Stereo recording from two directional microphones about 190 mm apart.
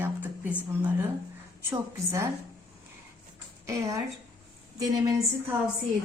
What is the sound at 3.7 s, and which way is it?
A woman's voice, 15° right (ahead or behind).